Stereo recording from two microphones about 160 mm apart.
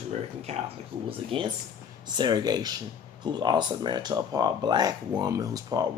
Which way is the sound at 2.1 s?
25° right (ahead or behind).